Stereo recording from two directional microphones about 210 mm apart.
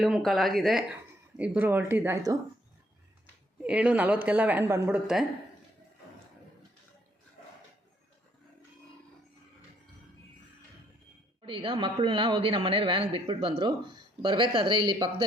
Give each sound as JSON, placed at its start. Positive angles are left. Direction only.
{"t": 0.0, "sound": "a woman's voice", "side_deg": 0}
{"t": 3.6, "sound": "a woman's voice", "side_deg": -5}
{"t": 11.4, "sound": "speech", "side_deg": -25}